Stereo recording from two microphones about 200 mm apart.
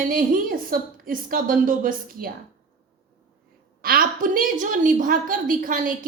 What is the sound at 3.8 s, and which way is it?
A woman's voice, 45° right (ahead or behind).